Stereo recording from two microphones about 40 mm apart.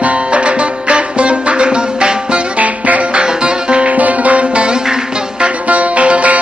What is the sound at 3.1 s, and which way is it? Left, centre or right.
Music, right.